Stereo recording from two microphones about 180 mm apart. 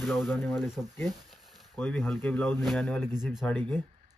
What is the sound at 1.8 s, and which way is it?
Speech, 10° left (ahead or behind).